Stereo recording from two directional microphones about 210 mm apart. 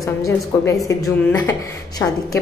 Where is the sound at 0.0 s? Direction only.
15° left (ahead or behind).